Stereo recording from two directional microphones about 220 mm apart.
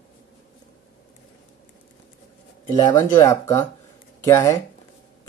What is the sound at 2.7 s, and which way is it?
Speech, 20° left (ahead or behind).